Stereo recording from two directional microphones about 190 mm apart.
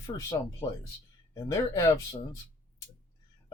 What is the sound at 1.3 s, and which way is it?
Speech, 20° left (ahead or behind).